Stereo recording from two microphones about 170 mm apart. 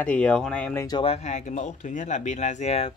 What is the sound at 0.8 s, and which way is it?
Speech, 25° left (ahead or behind).